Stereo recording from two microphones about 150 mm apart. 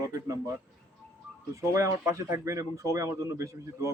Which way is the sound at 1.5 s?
20° right (ahead or behind).